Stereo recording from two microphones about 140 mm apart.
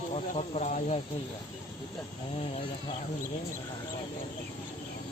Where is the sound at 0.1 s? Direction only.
50° left (ahead or behind).